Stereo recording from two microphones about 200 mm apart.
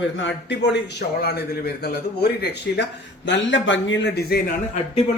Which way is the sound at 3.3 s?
65° left (ahead or behind).